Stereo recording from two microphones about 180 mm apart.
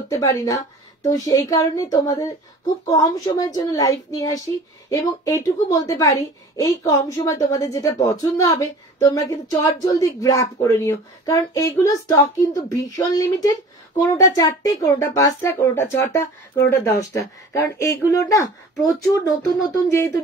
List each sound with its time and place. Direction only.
0.1 s a woman's voice: 20° left (ahead or behind)